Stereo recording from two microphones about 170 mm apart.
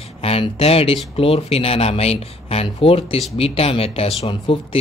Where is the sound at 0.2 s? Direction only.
35° left (ahead or behind).